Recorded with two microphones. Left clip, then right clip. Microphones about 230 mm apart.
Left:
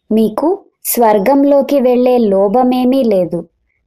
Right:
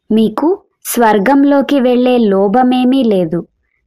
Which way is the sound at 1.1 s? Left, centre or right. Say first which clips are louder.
Left 1 dB; right.